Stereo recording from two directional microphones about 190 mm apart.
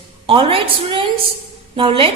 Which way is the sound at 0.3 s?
30° right (ahead or behind).